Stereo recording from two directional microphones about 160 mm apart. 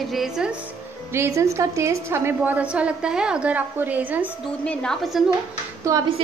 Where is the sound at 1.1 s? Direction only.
15° right (ahead or behind).